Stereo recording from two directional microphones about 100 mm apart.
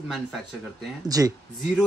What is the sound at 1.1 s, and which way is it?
Speech, 35° right (ahead or behind).